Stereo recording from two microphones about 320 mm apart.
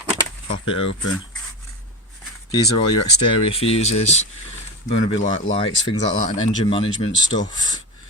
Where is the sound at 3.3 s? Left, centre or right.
Centre.